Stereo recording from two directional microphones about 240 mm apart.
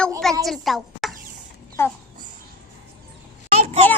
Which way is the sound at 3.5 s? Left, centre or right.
Right.